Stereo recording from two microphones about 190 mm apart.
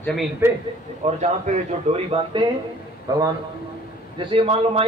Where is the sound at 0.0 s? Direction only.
Centre (ahead or behind).